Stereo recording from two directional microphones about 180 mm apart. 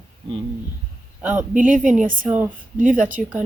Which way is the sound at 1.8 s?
5° right (ahead or behind).